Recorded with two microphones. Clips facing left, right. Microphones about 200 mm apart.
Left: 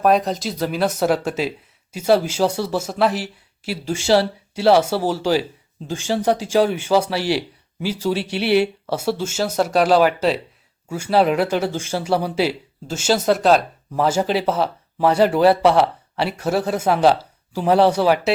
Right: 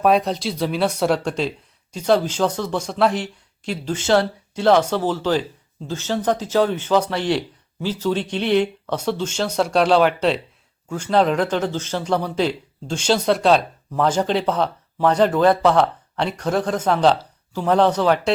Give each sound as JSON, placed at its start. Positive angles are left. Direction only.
{"t": 0.0, "sound": "speech", "side_deg": 0}